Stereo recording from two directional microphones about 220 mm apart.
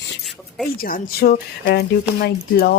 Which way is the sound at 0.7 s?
40° left (ahead or behind).